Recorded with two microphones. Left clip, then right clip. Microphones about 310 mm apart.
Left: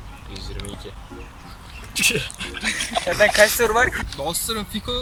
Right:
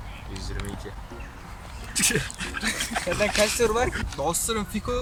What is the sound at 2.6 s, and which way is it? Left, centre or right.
Speech, right.